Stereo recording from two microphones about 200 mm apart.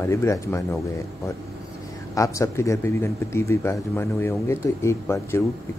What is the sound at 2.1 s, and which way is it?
A man's voice, 15° left (ahead or behind).